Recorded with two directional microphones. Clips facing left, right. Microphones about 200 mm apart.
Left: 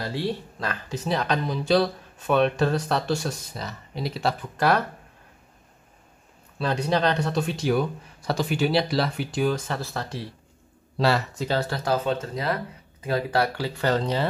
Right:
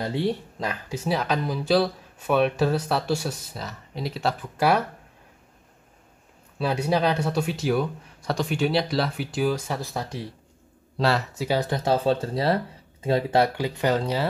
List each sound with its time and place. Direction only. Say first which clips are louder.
0.0 s speech: right 3 dB; 20° right (ahead or behind)
6.6 s speech: even; 10° right (ahead or behind)
11.0 s speech: left 1 dB; centre (ahead or behind)
11.4 s speech: right 3 dB; 15° right (ahead or behind)